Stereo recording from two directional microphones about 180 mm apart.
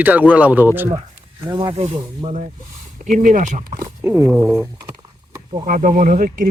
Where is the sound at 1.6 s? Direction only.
35° right (ahead or behind).